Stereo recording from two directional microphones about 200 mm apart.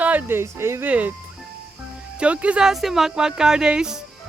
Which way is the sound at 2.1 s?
5° right (ahead or behind).